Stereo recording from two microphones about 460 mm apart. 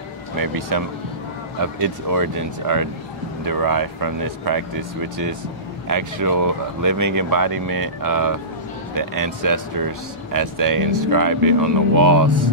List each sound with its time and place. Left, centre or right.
0.4 s speech: right